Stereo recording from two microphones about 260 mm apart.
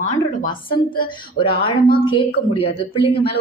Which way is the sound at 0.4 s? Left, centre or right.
Centre.